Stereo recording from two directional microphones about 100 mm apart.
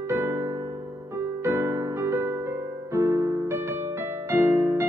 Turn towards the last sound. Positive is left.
turn(degrees=-25)  # may be behind; listen again after turning